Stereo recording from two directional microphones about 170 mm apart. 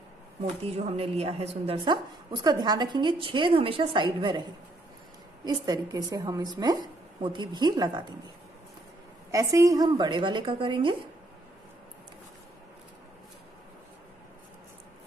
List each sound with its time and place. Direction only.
0.9 s speech: 35° right (ahead or behind)
1.9 s a woman's voice: 25° right (ahead or behind)
5.4 s a woman's voice: 25° right (ahead or behind)
9.3 s a woman's voice: 20° right (ahead or behind)